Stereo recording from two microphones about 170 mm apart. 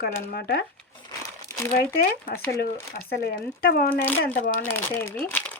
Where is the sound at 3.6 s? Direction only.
60° left (ahead or behind).